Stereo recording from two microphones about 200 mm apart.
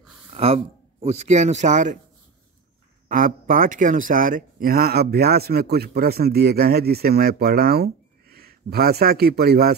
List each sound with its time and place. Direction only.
0.3 s a sound: 30° right (ahead or behind)
1.0 s speech: 35° right (ahead or behind)
3.1 s a man's voice: 45° right (ahead or behind)